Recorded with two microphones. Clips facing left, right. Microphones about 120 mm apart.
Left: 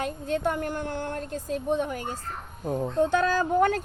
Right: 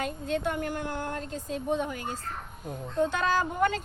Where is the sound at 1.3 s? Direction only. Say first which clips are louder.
Left 3 dB; 50° left (ahead or behind).